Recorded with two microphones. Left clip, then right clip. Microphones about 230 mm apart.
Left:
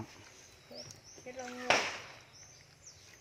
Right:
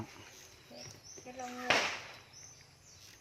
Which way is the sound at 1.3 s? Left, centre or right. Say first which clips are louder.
Left 2 dB; left.